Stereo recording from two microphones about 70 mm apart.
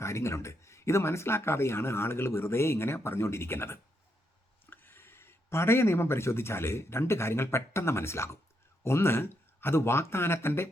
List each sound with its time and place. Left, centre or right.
0.0 s speech: left